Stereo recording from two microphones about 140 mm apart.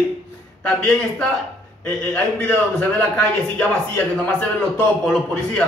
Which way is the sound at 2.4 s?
10° left (ahead or behind).